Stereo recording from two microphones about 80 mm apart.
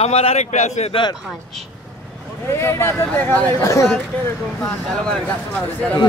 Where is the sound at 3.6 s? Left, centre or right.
Left.